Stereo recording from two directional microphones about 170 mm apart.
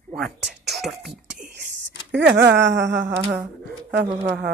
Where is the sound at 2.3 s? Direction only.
90° right.